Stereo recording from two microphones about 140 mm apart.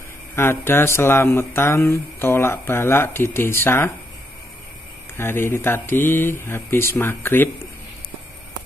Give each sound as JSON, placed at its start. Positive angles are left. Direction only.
{"t": 0.4, "sound": "speech", "side_deg": 15}
{"t": 5.1, "sound": "speech", "side_deg": 15}